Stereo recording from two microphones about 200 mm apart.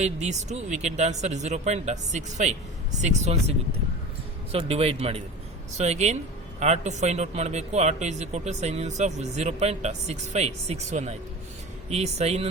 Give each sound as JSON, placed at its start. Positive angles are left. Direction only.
{"t": 0.0, "sound": "speech", "side_deg": -35}
{"t": 4.5, "sound": "a man's voice", "side_deg": -30}